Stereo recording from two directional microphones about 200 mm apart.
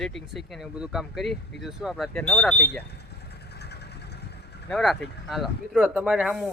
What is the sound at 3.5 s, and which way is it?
Vehicle, 55° left (ahead or behind).